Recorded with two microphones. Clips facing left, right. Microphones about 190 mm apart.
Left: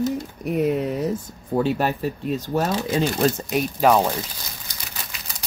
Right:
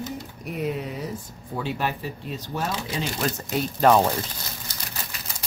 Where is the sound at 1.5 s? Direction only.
45° left (ahead or behind).